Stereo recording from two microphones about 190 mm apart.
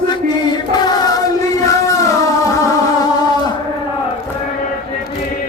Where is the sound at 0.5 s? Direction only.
20° left (ahead or behind).